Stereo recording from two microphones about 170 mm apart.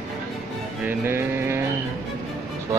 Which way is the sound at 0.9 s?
15° right (ahead or behind).